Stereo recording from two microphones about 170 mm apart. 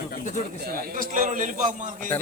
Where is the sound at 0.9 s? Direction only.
50° right (ahead or behind).